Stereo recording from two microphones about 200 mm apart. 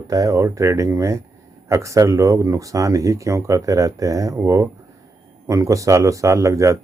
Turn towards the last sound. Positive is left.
turn(degrees=-15)  # may be behind; listen again after turning